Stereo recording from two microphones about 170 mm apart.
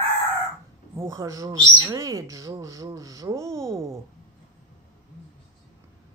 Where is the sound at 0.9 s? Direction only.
15° right (ahead or behind).